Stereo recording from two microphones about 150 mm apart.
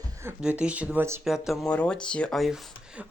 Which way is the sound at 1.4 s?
Centre (ahead or behind).